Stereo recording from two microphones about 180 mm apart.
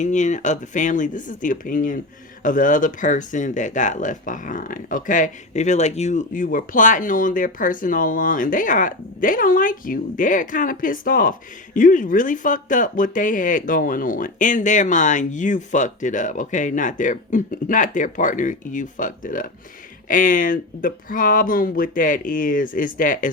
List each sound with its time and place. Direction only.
0.0 s speech: 40° left (ahead or behind)